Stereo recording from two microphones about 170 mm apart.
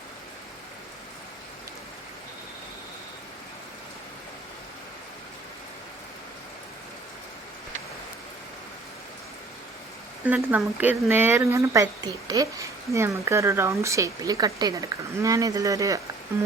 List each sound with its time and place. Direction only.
10.2 s speech: 10° right (ahead or behind)